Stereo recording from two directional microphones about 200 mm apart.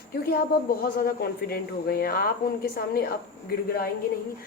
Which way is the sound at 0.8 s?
50° left (ahead or behind).